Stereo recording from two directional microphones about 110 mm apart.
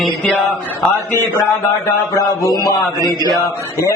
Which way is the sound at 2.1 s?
30° left (ahead or behind).